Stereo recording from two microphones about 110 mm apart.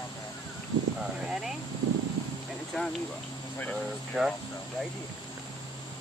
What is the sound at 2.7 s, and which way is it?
Speech, 5° left (ahead or behind).